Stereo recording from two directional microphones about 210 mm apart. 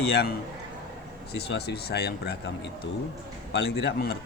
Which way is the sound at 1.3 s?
50° left (ahead or behind).